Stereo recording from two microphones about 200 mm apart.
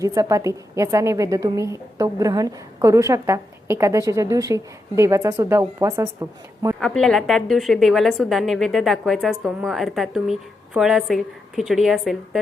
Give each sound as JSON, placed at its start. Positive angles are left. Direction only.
{"t": 0.0, "sound": "a woman's voice", "side_deg": -15}
{"t": 6.7, "sound": "a woman's voice", "side_deg": 5}